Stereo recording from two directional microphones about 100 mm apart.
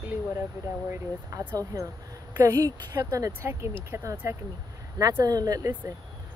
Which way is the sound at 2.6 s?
35° right (ahead or behind).